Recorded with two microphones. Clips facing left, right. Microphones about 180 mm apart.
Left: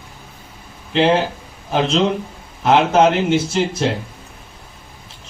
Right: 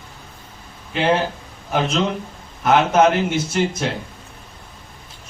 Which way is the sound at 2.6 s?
30° left (ahead or behind).